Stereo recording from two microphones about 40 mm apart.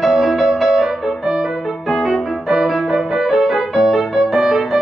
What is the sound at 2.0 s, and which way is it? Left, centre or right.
Music, centre.